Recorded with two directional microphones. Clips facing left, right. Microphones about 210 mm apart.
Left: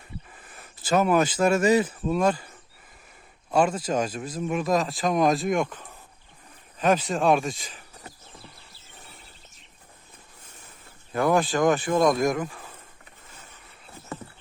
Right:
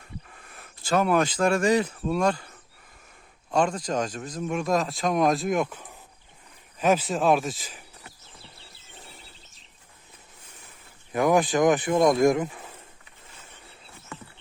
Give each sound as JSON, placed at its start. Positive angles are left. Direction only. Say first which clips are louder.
{"t": 0.3, "sound": "speech", "louder": "even", "side_deg": 0}
{"t": 3.5, "sound": "speech", "louder": "left 2 dB", "side_deg": 5}
{"t": 11.1, "sound": "speech", "louder": "right 1 dB", "side_deg": -15}